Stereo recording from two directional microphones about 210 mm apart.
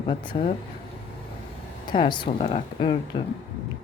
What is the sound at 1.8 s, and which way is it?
Speech, 20° left (ahead or behind).